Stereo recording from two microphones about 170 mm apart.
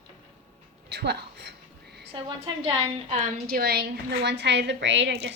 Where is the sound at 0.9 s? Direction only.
75° right (ahead or behind).